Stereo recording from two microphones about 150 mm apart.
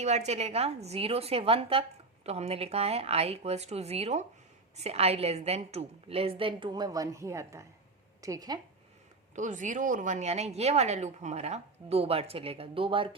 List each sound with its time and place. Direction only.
0.0 s a woman's voice: 50° right (ahead or behind); by 8.6 s 25° right (ahead or behind)
9.3 s a woman's voice: 55° right (ahead or behind); by 13.1 s 35° right (ahead or behind)